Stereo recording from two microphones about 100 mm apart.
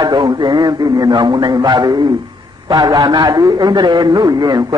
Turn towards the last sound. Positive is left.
turn(degrees=-40)  # may be behind; listen again after turning